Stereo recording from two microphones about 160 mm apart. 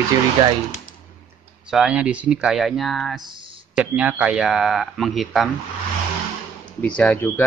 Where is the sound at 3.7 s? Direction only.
10° right (ahead or behind).